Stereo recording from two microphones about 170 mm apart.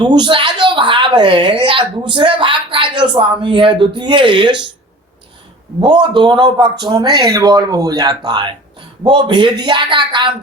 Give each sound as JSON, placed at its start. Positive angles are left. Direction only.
{"t": 0.0, "sound": "a woman's voice", "side_deg": -25}
{"t": 5.8, "sound": "a woman's voice", "side_deg": -25}